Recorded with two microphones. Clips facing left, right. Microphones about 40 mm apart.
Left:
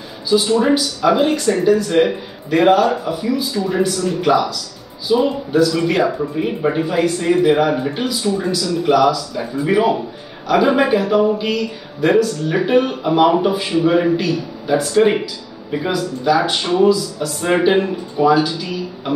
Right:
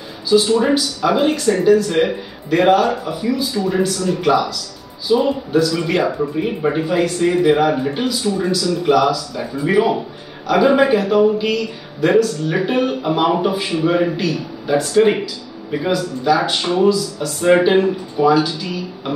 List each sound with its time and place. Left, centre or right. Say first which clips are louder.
0.3 s speech: even; centre